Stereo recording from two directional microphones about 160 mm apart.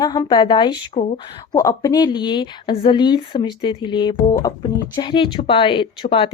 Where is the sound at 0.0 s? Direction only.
25° left (ahead or behind).